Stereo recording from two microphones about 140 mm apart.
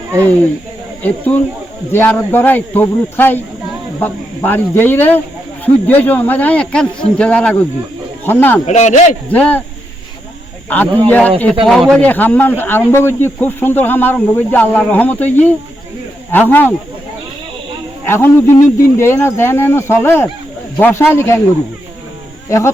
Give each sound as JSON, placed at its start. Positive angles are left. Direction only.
{"t": 0.2, "sound": "a man's voice", "side_deg": 10}
{"t": 8.6, "sound": "speech", "side_deg": 55}
{"t": 9.3, "sound": "a man's voice", "side_deg": 10}
{"t": 10.7, "sound": "a man's voice", "side_deg": 10}
{"t": 18.0, "sound": "a man's voice", "side_deg": 15}
{"t": 22.4, "sound": "speech", "side_deg": 20}